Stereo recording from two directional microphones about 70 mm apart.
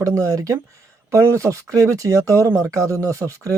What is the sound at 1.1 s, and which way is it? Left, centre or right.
Speech, right.